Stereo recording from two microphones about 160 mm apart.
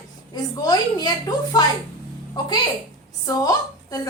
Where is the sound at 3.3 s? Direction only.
20° left (ahead or behind).